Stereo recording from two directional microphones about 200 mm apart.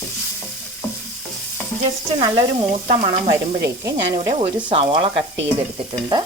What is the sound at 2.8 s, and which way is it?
Speech, 40° right (ahead or behind).